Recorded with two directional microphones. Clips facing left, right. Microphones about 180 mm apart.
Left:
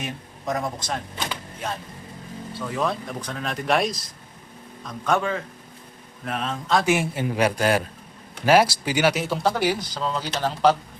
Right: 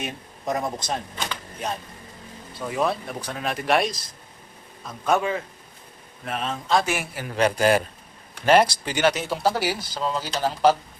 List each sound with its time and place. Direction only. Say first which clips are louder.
0.0 s speech: even; 20° right (ahead or behind)
2.6 s speech: right 1 dB; 15° right (ahead or behind)
6.8 s a man's voice: left 6 dB; 20° left (ahead or behind)
7.3 s speech: right 2 dB; 5° left (ahead or behind)